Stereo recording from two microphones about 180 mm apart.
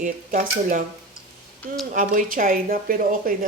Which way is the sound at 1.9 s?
45° right (ahead or behind).